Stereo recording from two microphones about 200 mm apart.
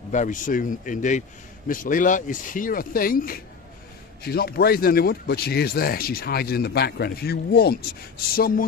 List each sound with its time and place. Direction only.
0.1 s speech: 40° left (ahead or behind)